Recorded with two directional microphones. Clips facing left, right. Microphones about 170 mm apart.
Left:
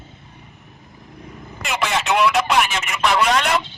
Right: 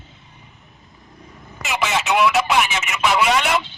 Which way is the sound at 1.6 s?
Centre (ahead or behind).